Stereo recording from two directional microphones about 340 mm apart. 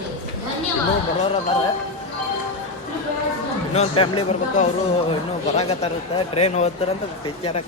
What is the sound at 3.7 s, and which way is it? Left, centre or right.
A woman's voice, centre.